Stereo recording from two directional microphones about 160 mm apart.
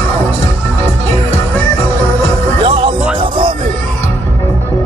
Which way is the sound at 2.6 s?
35° right (ahead or behind).